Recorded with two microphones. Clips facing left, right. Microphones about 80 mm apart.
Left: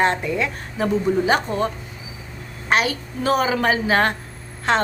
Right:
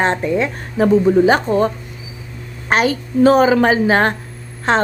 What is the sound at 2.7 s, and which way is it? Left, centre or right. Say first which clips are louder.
A woman's voice: right 5 dB; right.